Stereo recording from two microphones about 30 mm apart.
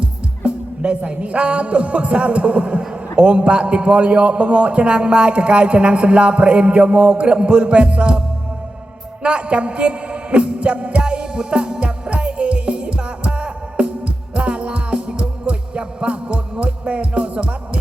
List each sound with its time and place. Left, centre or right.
0.0 s a man's voice: right
9.2 s music: right